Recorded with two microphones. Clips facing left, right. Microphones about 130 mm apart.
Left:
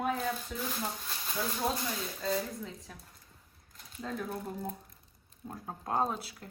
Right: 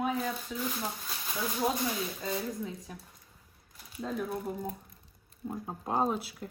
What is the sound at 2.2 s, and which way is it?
Speech, 5° right (ahead or behind).